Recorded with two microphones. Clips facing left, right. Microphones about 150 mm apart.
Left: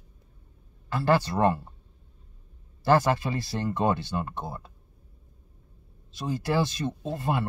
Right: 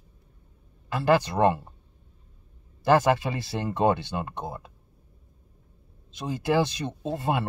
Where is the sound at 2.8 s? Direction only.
20° right (ahead or behind).